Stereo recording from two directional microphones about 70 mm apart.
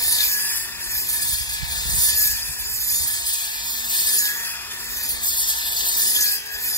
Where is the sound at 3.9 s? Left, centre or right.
Left.